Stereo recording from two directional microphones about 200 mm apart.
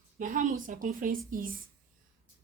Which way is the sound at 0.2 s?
45° right (ahead or behind).